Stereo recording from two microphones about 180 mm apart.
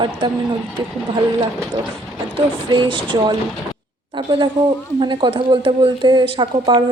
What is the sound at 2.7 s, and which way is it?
Speech, 25° right (ahead or behind).